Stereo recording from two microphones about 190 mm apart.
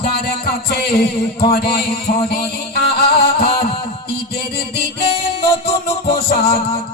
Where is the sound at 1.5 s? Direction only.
55° left (ahead or behind).